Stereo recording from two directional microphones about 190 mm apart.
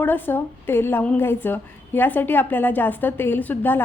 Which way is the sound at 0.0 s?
10° left (ahead or behind).